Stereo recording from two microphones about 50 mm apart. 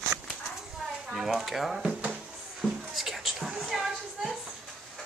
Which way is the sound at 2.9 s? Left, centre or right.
Centre.